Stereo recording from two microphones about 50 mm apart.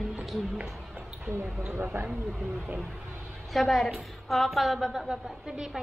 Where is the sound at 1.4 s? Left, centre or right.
Centre.